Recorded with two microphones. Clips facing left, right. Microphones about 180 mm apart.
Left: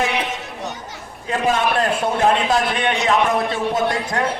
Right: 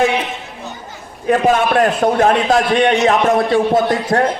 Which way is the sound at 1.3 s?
50° right (ahead or behind).